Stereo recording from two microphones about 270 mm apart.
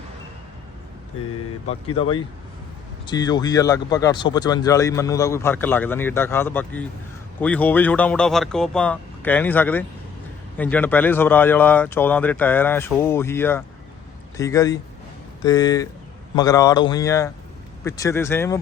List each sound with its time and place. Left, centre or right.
2.0 s speech: left